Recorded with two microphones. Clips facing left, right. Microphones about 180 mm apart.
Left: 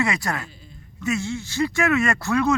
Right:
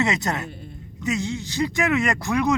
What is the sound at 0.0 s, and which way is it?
A man's voice, 20° right (ahead or behind).